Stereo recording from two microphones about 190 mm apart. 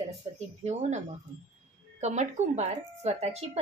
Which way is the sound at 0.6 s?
40° right (ahead or behind).